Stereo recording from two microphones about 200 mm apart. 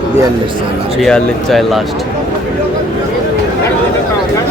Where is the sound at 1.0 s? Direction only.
Centre (ahead or behind).